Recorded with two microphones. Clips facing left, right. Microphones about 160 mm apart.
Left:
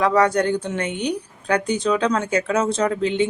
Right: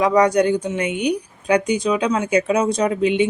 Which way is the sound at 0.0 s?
15° right (ahead or behind).